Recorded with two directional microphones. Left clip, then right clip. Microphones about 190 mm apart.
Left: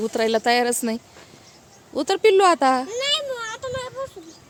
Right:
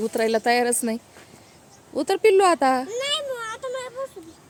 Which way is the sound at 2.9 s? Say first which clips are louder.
Left 2 dB; 5° right (ahead or behind).